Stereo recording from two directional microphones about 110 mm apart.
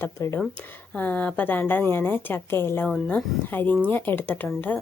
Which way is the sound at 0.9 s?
15° left (ahead or behind).